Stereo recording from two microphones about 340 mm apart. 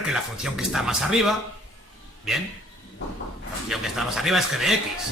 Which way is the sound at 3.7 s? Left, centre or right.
Centre.